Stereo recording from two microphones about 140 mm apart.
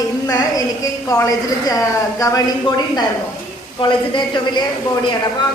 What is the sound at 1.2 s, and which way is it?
A woman's voice, 25° left (ahead or behind).